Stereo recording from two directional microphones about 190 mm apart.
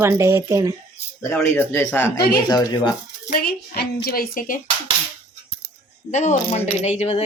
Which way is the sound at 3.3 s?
55° left (ahead or behind).